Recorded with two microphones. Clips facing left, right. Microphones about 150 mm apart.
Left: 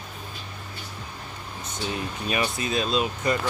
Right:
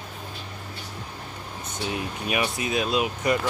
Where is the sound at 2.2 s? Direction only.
10° right (ahead or behind).